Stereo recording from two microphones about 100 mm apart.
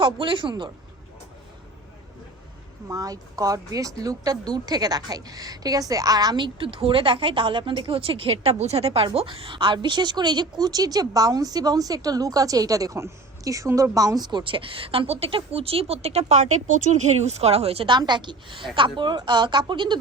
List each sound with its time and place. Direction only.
0.0 s speech: 60° right (ahead or behind)
2.9 s speech: 35° right (ahead or behind); by 9.0 s 80° right
9.1 s speech: 65° right (ahead or behind)
17.9 s speech: 50° right (ahead or behind)